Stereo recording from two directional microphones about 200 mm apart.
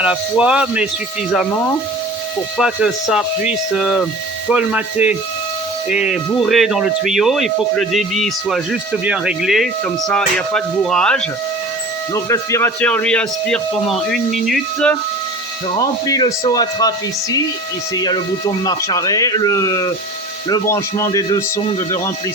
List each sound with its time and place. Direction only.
0.0 s speech: 5° right (ahead or behind)
2.6 s speech: centre (ahead or behind)
12.1 s speech: 15° left (ahead or behind)
15.7 s speech: 20° left (ahead or behind)
17.9 s speech: 20° left (ahead or behind)